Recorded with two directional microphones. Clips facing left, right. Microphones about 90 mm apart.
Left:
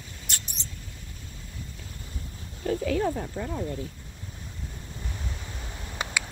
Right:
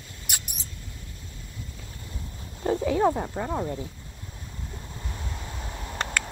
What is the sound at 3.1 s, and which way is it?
Speech, 30° right (ahead or behind).